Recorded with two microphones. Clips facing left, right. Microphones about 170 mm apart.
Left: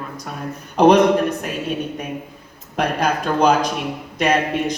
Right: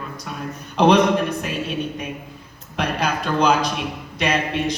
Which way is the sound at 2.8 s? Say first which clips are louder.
Left 3 dB; 50° left (ahead or behind).